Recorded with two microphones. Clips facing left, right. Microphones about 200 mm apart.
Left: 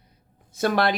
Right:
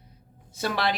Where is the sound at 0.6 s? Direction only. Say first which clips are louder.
Left 5 dB; 50° left (ahead or behind).